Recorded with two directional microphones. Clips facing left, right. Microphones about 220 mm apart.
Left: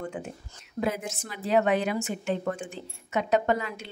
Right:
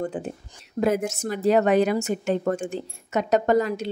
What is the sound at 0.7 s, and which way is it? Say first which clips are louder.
A woman's voice: right 7 dB; 45° right (ahead or behind).